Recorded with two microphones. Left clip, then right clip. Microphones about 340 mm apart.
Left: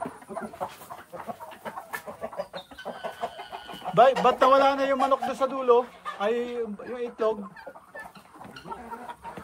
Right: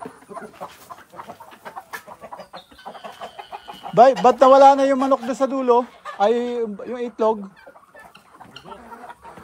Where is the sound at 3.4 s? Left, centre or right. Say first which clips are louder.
Right 3 dB; centre.